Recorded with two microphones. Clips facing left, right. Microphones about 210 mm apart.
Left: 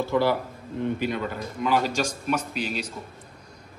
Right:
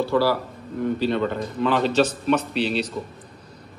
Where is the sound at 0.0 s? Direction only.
20° left (ahead or behind).